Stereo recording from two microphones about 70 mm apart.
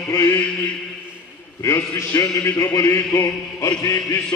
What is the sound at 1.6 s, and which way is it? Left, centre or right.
A man's voice, left.